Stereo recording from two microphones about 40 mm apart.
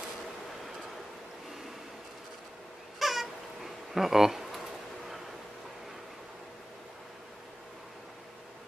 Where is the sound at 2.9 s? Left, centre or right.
Centre.